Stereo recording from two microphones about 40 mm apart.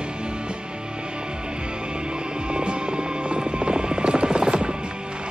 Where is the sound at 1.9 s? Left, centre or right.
Right.